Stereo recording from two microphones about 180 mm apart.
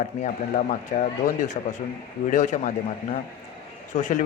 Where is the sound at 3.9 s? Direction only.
40° left (ahead or behind).